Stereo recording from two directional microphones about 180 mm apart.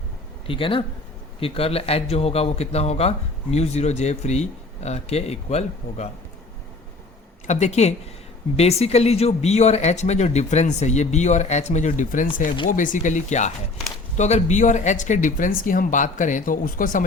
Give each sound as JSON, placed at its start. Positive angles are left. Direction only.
{"t": 0.4, "sound": "speech", "side_deg": 30}
{"t": 7.4, "sound": "speech", "side_deg": 40}